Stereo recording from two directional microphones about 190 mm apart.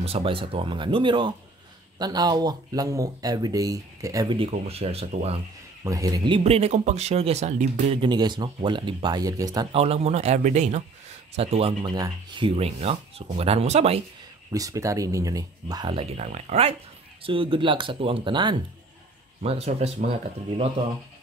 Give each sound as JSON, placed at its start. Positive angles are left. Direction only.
{"t": 0.0, "sound": "a man's voice", "side_deg": -30}
{"t": 5.9, "sound": "a man's voice", "side_deg": -20}
{"t": 9.8, "sound": "speech", "side_deg": -35}
{"t": 14.5, "sound": "a man's voice", "side_deg": -20}